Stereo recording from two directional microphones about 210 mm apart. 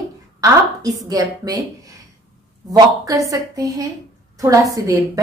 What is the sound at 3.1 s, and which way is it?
A woman's voice, 15° right (ahead or behind).